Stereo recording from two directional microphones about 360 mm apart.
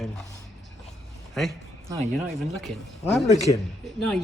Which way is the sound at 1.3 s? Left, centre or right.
Centre.